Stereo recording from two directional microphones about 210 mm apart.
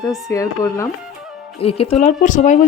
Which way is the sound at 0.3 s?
15° left (ahead or behind).